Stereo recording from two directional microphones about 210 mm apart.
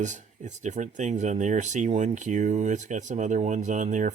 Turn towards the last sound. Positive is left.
turn(degrees=-35)  # may be behind; listen again after turning